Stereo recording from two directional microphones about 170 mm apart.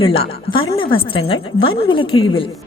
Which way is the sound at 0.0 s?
35° left (ahead or behind).